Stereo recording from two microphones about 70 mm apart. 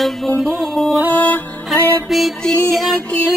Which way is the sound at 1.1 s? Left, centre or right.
Left.